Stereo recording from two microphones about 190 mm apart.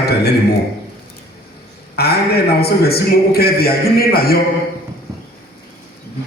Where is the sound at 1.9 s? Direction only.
55° left (ahead or behind).